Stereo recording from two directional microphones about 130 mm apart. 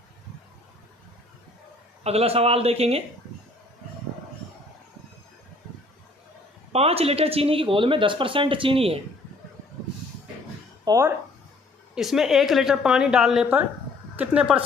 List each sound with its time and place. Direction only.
2.0 s speech: 50° right (ahead or behind)
6.7 s speech: 50° right (ahead or behind)
10.8 s speech: 25° right (ahead or behind)
11.9 s a woman's voice: 5° right (ahead or behind)